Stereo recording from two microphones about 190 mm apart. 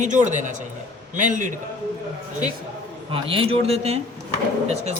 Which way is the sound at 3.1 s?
30° right (ahead or behind).